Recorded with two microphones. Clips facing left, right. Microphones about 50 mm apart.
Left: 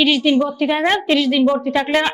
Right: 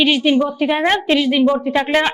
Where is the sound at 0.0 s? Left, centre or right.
Centre.